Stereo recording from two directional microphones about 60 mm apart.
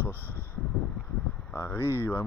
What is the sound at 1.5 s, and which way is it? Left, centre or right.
Speech, left.